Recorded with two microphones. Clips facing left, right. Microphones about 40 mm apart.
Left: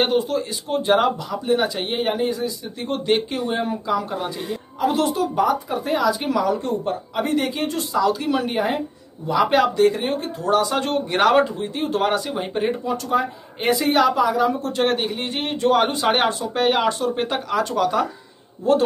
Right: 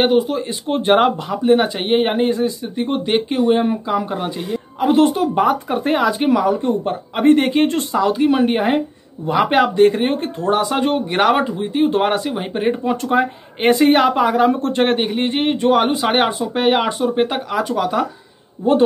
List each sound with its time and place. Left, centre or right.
0.0 s speech: centre
0.4 s speech: right
2.9 s speech: centre
6.9 s speech: right
10.6 s speech: centre
12.8 s speech: right
15.8 s speech: centre